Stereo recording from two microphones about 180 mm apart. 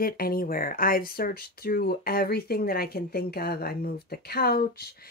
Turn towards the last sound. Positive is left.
turn(degrees=60)  # may be behind; listen again after turning